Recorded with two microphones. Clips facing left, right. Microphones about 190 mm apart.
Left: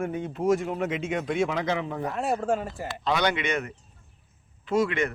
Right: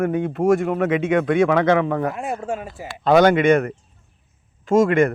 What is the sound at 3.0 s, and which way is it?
Speech, 50° right (ahead or behind).